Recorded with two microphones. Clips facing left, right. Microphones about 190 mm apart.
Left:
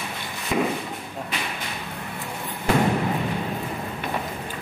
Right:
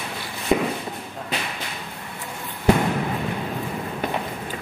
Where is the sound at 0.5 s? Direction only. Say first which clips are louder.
Right 3 dB; 35° right (ahead or behind).